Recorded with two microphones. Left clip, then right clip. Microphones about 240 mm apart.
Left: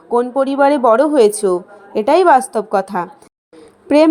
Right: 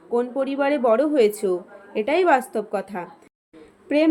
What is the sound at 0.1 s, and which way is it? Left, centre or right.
A woman's voice, left.